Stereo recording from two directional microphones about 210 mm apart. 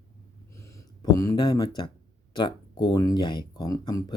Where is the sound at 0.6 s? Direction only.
15° left (ahead or behind).